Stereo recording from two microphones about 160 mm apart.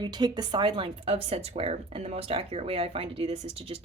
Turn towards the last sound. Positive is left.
turn(degrees=-35)  # may be behind; listen again after turning